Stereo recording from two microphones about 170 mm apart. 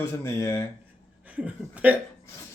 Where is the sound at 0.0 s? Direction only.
15° left (ahead or behind).